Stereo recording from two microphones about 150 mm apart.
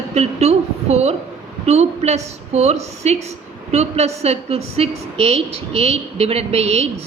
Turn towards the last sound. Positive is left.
turn(degrees=-45)  # may be behind; listen again after turning